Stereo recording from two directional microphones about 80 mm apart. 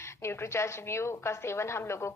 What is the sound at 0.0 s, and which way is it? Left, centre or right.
Speech, left.